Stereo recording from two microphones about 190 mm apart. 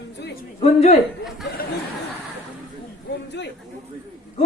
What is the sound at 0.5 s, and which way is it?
Speech, 35° left (ahead or behind).